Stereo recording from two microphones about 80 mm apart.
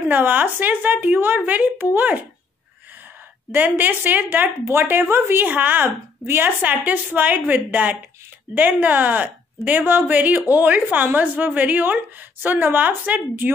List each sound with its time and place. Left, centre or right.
0.0 s speech: right
3.5 s speech: right